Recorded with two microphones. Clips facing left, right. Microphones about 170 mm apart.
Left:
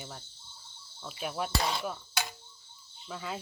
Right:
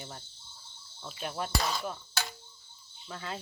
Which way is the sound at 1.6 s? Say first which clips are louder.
Left 1 dB; 25° left (ahead or behind).